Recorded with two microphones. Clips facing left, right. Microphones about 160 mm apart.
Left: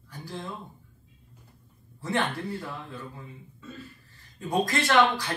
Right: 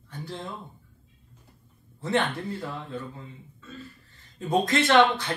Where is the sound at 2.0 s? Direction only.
25° right (ahead or behind).